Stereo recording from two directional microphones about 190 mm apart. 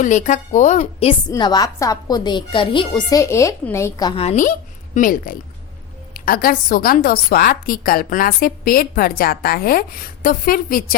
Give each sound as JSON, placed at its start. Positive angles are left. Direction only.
{"t": 0.0, "sound": "a woman's voice", "side_deg": 40}
{"t": 1.3, "sound": "a woman's voice", "side_deg": 20}
{"t": 4.2, "sound": "a woman's voice", "side_deg": 40}